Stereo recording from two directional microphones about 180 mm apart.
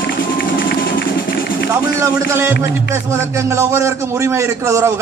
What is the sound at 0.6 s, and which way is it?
Run, 90° left.